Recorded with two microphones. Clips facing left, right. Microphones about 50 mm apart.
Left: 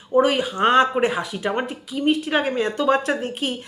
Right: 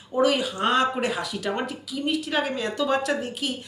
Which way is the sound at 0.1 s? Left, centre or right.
Left.